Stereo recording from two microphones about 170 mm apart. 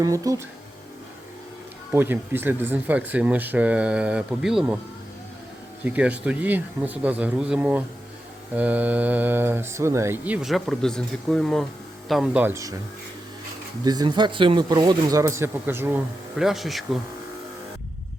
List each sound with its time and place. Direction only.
0.0 s speech: 20° right (ahead or behind)
1.9 s speech: 10° right (ahead or behind)
5.8 s speech: 10° right (ahead or behind)
13.8 s speech: 25° right (ahead or behind)
16.4 s speech: centre (ahead or behind)